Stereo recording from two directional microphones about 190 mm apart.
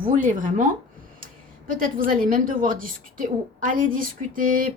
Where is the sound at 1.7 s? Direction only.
45° right (ahead or behind).